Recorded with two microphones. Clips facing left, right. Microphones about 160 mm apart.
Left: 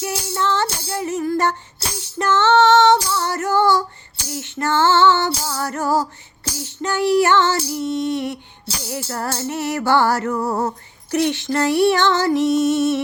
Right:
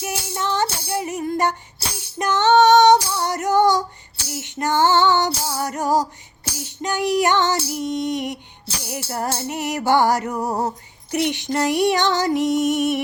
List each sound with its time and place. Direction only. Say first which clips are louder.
0.0 s music: left 3 dB; 15° right (ahead or behind)
2.0 s female singing: left 2 dB; 15° right (ahead or behind)
4.4 s music: even; 15° right (ahead or behind)